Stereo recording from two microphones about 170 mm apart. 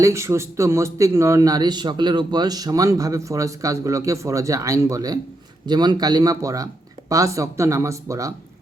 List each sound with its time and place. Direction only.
0.0 s a man's voice: 15° right (ahead or behind)